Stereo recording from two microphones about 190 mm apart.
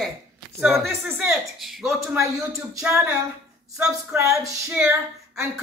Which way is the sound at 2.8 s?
5° right (ahead or behind).